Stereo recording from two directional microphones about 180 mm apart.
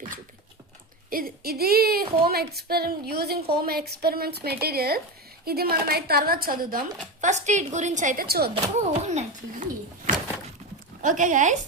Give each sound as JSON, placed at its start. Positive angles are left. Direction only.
{"t": 1.1, "sound": "speech", "side_deg": -55}
{"t": 8.9, "sound": "speech", "side_deg": -40}
{"t": 11.0, "sound": "speech", "side_deg": -45}